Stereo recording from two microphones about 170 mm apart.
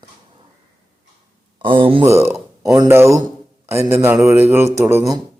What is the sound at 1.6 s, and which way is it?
Speech, 30° right (ahead or behind).